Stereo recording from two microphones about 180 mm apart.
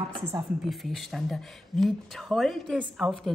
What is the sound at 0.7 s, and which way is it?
Speech, centre (ahead or behind).